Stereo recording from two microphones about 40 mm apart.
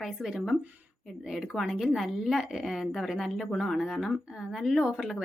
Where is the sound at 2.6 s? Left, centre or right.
Centre.